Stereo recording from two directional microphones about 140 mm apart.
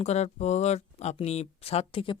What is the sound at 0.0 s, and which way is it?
Speech, 50° left (ahead or behind).